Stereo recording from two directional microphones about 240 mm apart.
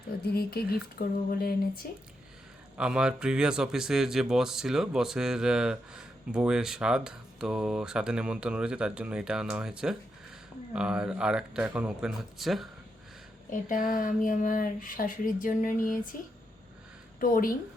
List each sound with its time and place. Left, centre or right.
0.3 s speech: left
2.7 s speech: centre
13.5 s speech: left
17.2 s speech: left